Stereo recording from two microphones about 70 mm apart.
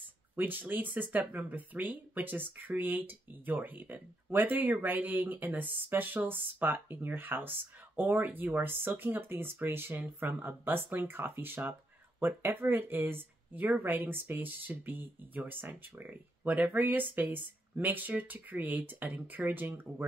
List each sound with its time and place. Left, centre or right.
0.4 s speech: right